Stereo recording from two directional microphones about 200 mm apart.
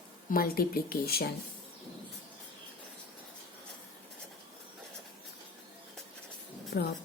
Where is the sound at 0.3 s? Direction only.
45° left (ahead or behind).